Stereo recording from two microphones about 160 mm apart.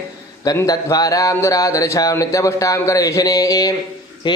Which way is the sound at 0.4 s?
20° left (ahead or behind).